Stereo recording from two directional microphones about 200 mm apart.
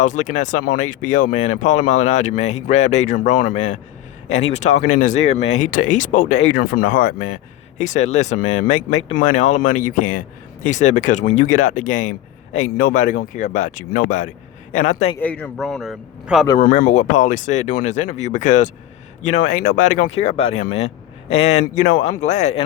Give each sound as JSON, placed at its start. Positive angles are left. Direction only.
{"t": 0.0, "sound": "speech", "side_deg": 35}
{"t": 15.2, "sound": "a man's voice", "side_deg": 5}
{"t": 16.6, "sound": "speech", "side_deg": 40}